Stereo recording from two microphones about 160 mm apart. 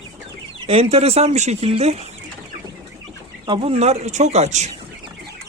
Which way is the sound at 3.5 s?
40° right (ahead or behind).